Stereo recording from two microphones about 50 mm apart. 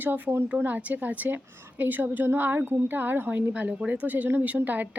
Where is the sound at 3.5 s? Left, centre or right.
Right.